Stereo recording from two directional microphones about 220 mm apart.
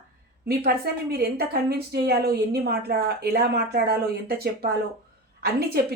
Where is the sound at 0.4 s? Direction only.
45° right (ahead or behind).